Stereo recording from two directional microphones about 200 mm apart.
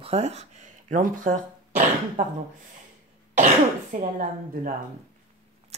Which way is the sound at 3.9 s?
40° right (ahead or behind).